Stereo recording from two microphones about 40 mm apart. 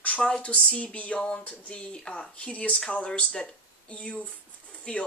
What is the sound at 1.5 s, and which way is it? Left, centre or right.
Speech, left.